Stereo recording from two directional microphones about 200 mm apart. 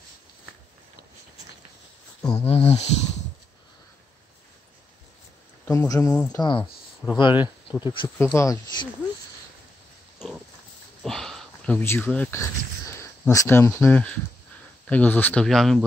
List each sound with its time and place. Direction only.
2.3 s speech: 30° left (ahead or behind)
5.7 s speech: 15° left (ahead or behind)
10.1 s pig: 5° right (ahead or behind)
11.0 s a sound: centre (ahead or behind)
13.8 s speech: 5° left (ahead or behind)